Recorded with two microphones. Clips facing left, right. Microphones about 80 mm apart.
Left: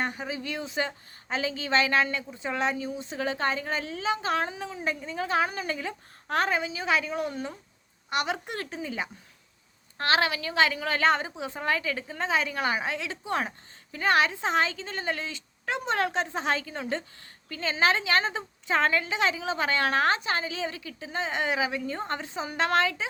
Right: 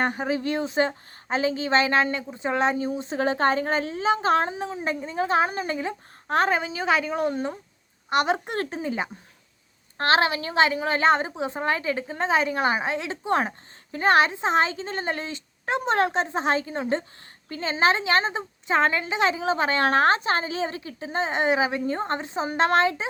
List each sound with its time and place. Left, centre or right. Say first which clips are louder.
0.0 s a woman's voice: right 7 dB; right